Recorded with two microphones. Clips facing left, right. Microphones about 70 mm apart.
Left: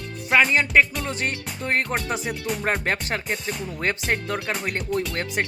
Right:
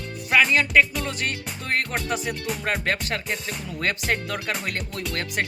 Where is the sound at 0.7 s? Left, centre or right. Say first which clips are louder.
Left 1 dB; left.